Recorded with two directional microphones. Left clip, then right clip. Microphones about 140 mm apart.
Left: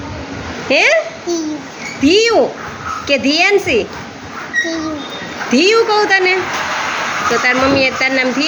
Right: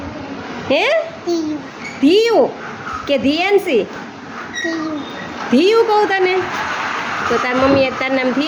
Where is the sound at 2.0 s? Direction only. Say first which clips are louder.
Left 1 dB; 10° right (ahead or behind).